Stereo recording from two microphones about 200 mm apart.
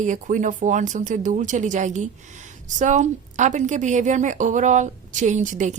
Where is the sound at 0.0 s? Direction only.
40° right (ahead or behind).